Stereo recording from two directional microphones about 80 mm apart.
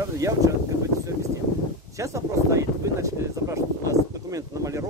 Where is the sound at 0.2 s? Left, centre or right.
Right.